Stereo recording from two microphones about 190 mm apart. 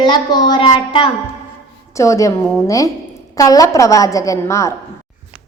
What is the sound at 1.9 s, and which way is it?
A woman's voice, 15° left (ahead or behind).